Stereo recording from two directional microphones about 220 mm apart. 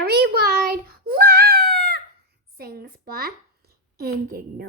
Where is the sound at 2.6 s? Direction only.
45° right (ahead or behind).